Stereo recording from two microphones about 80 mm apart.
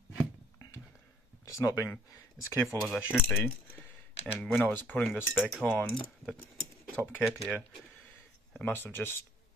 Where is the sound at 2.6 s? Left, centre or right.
Centre.